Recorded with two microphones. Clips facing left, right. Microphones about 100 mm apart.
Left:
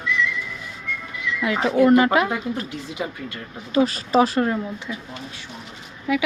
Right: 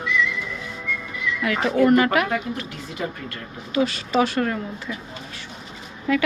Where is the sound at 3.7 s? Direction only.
35° left (ahead or behind).